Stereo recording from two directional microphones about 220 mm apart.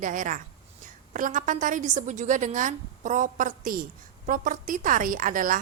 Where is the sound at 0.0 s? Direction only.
35° right (ahead or behind).